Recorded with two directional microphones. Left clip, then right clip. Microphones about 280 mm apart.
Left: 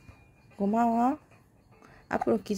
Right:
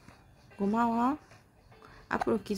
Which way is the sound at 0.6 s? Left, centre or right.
Centre.